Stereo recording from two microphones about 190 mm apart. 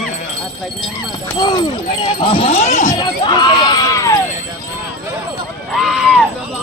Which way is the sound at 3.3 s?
25° left (ahead or behind).